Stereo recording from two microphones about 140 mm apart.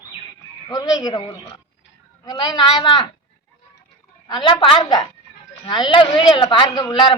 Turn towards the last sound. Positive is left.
turn(degrees=30)  # may be behind; listen again after turning